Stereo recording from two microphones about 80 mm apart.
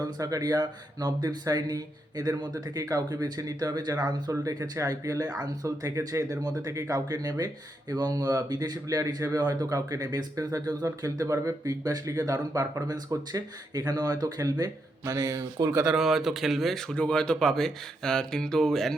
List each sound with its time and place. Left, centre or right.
0.0 s speech: right
4.3 s speech: right
15.9 s speech: centre